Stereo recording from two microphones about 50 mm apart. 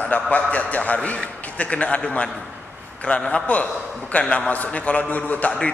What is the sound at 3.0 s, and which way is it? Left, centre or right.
A man's voice, left.